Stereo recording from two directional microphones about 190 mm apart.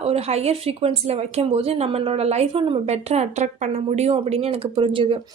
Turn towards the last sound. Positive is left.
turn(degrees=-25)  # may be behind; listen again after turning